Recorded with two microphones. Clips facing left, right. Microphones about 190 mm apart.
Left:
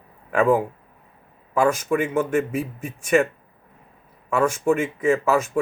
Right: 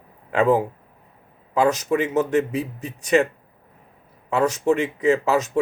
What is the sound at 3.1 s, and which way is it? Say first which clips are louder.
Speech: even; 25° right (ahead or behind).